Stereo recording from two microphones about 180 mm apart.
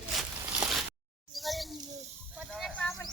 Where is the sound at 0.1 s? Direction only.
Centre (ahead or behind).